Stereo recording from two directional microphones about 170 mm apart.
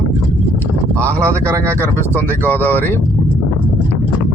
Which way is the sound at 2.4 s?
10° left (ahead or behind).